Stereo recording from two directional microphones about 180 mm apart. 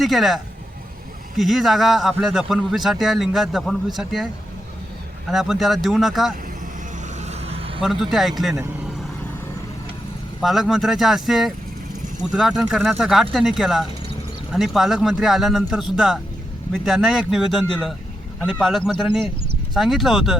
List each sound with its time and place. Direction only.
0.0 s a man's voice: centre (ahead or behind)
1.4 s a man's voice: centre (ahead or behind)
5.3 s a man's voice: centre (ahead or behind)
7.2 s vehicle: 35° right (ahead or behind)
7.8 s a man's voice: centre (ahead or behind)
10.4 s a man's voice: centre (ahead or behind)
18.4 s a man's voice: centre (ahead or behind)